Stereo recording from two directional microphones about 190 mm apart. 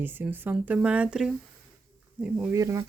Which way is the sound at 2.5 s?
15° right (ahead or behind).